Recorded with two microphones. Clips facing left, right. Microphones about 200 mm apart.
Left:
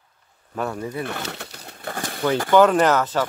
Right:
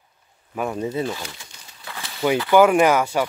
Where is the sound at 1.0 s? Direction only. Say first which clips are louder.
Right 1 dB; 65° left (ahead or behind); by 2.2 s 50° left (ahead or behind).